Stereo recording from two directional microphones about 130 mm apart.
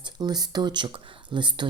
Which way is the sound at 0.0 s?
35° right (ahead or behind).